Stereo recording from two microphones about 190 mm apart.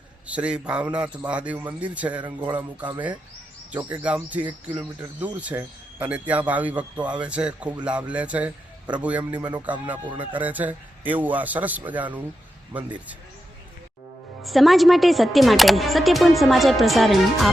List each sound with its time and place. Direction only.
0.3 s speech: 5° right (ahead or behind)
10.0 s speech: 25° right (ahead or behind)
10.3 s speech: 10° right (ahead or behind)
14.4 s speech: centre (ahead or behind)